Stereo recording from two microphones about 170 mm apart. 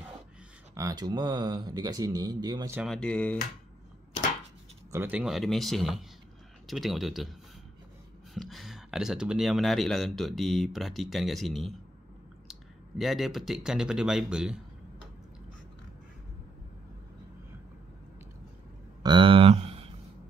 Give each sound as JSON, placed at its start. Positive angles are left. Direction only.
{"t": 0.7, "sound": "speech", "side_deg": -20}
{"t": 2.9, "sound": "speech", "side_deg": 5}
{"t": 4.9, "sound": "speech", "side_deg": -10}
{"t": 8.4, "sound": "speech", "side_deg": 0}
{"t": 19.0, "sound": "a sound", "side_deg": -30}